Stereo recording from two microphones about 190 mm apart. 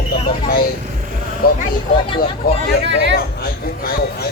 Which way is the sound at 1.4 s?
50° left (ahead or behind).